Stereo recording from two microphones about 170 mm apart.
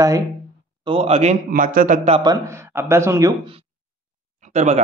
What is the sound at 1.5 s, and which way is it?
Speech, 55° right (ahead or behind).